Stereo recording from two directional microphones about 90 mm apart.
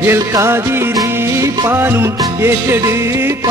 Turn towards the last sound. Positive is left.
turn(degrees=-30)  # may be behind; listen again after turning